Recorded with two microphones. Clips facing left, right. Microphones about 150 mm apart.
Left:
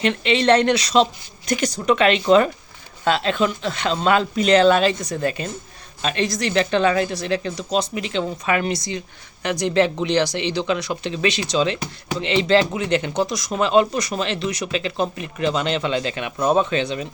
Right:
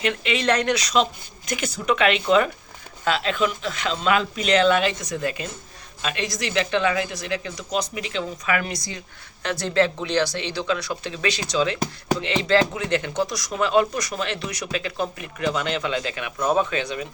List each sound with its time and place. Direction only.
0.0 s speech: 30° left (ahead or behind)